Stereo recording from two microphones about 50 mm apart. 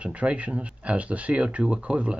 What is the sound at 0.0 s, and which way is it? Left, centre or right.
Speech, right.